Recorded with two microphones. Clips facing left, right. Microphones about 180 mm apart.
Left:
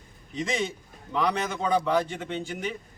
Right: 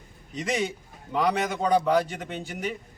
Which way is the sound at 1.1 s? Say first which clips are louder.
Right 2 dB; 10° right (ahead or behind).